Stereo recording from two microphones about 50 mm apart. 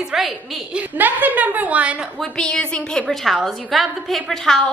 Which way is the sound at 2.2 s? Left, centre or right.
Centre.